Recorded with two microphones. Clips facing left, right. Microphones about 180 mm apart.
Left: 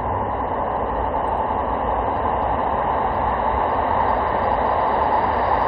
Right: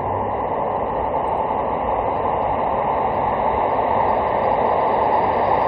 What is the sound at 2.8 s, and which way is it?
Vehicle, 15° right (ahead or behind).